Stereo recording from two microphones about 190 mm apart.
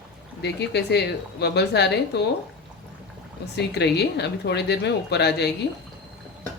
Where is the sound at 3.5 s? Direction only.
60° left (ahead or behind).